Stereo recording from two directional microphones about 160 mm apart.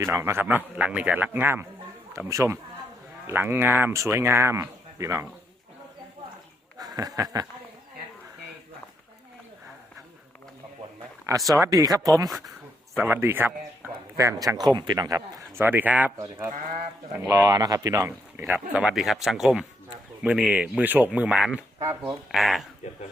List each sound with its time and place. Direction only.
0.0 s speech: 15° right (ahead or behind)
6.7 s a sound: 25° right (ahead or behind)
11.3 s speech: 20° right (ahead or behind)
21.8 s speech: 20° right (ahead or behind)
22.3 s speech: centre (ahead or behind)